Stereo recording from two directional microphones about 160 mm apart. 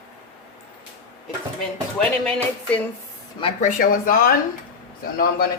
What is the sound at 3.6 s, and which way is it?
A woman's voice, 55° left (ahead or behind).